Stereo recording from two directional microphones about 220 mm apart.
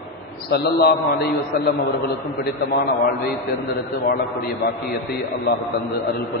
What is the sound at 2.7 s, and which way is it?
Speech, 45° left (ahead or behind).